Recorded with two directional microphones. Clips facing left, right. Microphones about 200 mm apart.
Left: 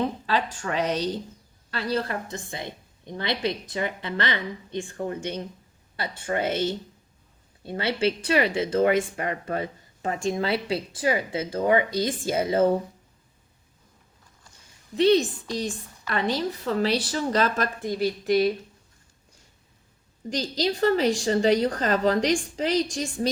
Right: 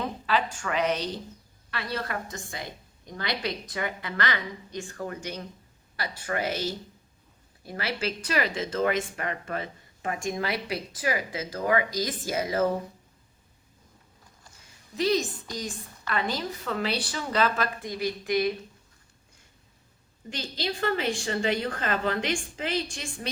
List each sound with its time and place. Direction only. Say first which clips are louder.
0.3 s a woman's voice: left 1 dB; 35° left (ahead or behind)
14.9 s a woman's voice: left 6 dB; 30° left (ahead or behind)
20.3 s a woman's voice: left 6 dB; 40° left (ahead or behind)